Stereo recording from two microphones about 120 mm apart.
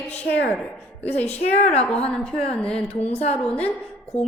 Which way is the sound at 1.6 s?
60° left (ahead or behind).